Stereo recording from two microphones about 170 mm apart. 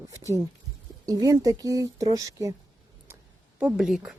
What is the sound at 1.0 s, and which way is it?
Speech, 20° right (ahead or behind).